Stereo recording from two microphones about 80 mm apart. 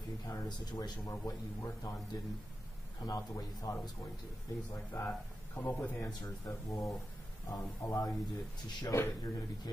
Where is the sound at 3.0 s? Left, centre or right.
Left.